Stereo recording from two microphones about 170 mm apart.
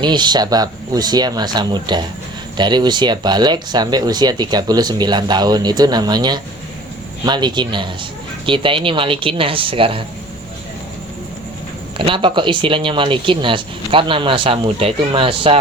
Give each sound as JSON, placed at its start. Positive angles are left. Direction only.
{"t": 0.0, "sound": "speech", "side_deg": -25}
{"t": 11.9, "sound": "speech", "side_deg": -30}